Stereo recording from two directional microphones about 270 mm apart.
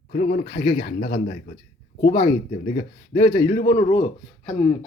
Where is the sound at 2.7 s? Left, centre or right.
Left.